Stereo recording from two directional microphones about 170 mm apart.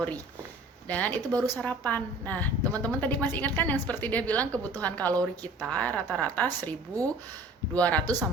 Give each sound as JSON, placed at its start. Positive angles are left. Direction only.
{"t": 0.9, "sound": "a woman's voice", "side_deg": 10}
{"t": 1.3, "sound": "speech", "side_deg": -20}
{"t": 1.5, "sound": "a woman's voice", "side_deg": 10}